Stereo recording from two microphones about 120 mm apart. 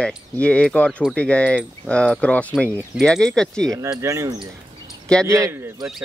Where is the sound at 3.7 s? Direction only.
30° right (ahead or behind).